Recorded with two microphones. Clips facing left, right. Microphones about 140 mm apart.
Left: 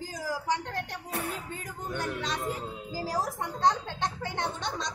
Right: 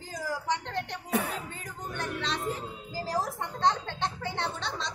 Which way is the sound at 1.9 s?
15° left (ahead or behind).